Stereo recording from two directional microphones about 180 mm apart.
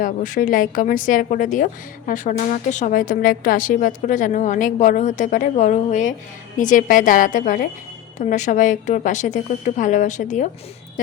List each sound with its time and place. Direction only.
0.0 s a woman's voice: 45° left (ahead or behind)